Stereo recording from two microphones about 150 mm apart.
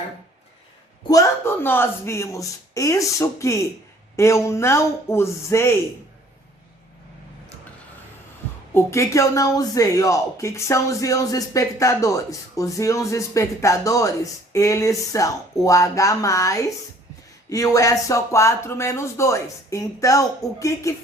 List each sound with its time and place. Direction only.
1.0 s speech: 20° left (ahead or behind)
8.7 s speech: 20° left (ahead or behind)